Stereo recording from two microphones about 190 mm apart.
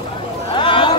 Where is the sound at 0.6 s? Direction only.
25° left (ahead or behind).